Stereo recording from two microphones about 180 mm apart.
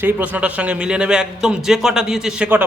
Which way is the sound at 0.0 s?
10° right (ahead or behind).